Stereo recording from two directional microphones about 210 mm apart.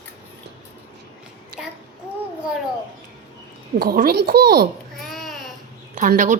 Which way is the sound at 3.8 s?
45° right (ahead or behind).